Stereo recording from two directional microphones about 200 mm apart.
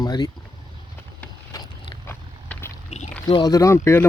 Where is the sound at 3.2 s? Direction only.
20° left (ahead or behind).